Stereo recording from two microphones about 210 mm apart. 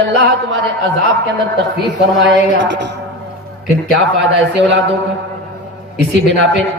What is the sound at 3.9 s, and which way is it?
Speech, 65° right (ahead or behind).